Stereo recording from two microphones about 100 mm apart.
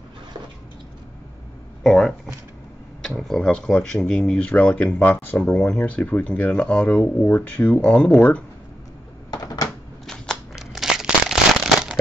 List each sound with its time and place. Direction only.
1.8 s speech: 5° left (ahead or behind)
9.3 s typewriter: 40° left (ahead or behind)
10.0 s a sound: centre (ahead or behind)